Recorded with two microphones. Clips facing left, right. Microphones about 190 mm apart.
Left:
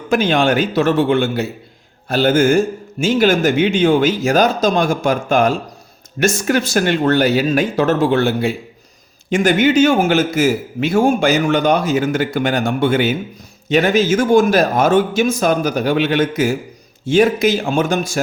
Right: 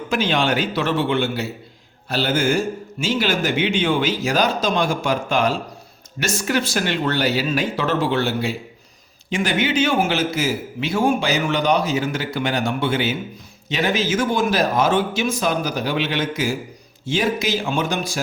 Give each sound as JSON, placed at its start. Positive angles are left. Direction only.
{"t": 0.1, "sound": "a man's voice", "side_deg": 50}